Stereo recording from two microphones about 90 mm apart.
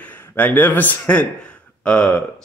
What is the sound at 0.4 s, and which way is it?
Speech, 20° left (ahead or behind).